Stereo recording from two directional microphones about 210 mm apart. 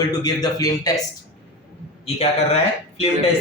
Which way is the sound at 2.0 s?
30° left (ahead or behind).